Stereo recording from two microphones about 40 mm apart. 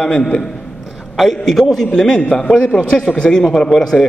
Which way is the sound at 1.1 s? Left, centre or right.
Centre.